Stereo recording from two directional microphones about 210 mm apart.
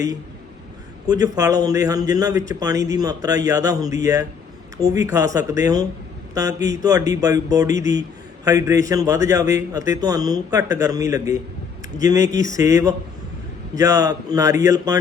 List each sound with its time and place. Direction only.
1.0 s a man's voice: 15° right (ahead or behind)
12.3 s speech: 40° left (ahead or behind)
12.5 s a man's voice: 15° right (ahead or behind)